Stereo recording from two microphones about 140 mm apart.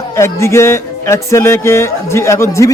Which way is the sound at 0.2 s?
20° left (ahead or behind).